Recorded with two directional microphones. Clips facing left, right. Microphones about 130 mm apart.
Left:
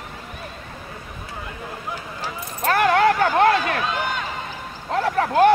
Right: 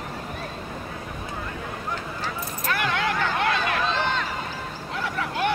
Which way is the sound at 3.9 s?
10° left (ahead or behind).